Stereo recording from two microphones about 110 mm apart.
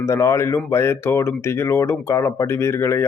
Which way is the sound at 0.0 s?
25° left (ahead or behind).